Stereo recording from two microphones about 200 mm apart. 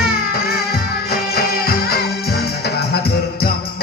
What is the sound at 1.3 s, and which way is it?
Music, 50° left (ahead or behind).